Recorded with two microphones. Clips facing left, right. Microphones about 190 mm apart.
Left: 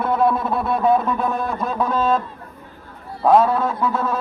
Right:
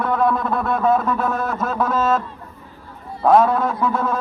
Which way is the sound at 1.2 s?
Centre (ahead or behind).